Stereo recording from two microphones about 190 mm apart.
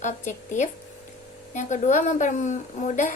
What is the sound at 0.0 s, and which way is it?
A woman's voice, 40° left (ahead or behind).